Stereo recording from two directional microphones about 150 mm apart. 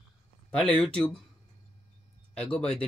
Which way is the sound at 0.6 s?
5° left (ahead or behind).